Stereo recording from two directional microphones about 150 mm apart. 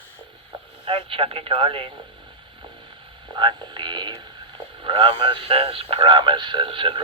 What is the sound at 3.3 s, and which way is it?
A man's voice, 30° right (ahead or behind).